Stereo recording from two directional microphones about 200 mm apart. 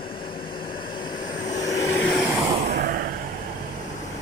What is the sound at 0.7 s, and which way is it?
Vehicle, 45° left (ahead or behind).